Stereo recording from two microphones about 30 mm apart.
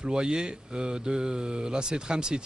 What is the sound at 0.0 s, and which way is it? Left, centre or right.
Speech, right.